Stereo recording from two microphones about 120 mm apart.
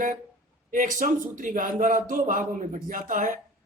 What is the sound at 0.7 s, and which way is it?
Speech, 90° right.